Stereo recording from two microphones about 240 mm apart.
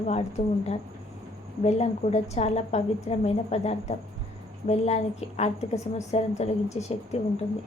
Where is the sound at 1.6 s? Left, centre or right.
Left.